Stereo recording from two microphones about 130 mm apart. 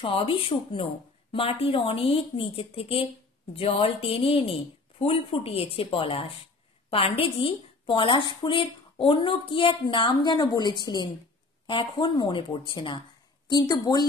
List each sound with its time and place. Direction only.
0.0 s a woman's voice: 45° left (ahead or behind)